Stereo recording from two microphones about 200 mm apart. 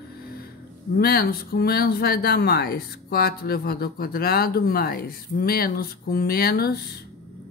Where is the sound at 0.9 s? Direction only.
50° left (ahead or behind).